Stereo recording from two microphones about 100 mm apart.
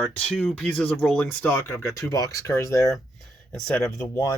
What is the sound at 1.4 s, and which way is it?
Speech, 20° left (ahead or behind).